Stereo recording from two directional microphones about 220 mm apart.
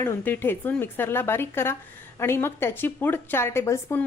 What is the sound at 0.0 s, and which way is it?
A woman's voice, 10° left (ahead or behind).